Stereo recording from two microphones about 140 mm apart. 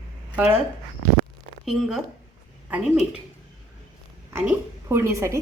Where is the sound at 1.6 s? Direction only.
5° right (ahead or behind).